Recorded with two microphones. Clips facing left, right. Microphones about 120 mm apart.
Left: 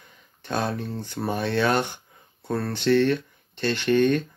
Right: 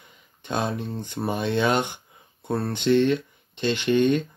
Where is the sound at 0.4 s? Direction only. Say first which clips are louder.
Even; 15° right (ahead or behind).